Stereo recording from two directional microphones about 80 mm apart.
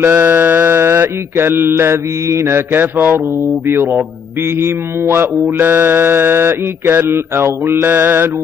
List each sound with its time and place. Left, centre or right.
0.0 s mantra: right
3.6 s music: right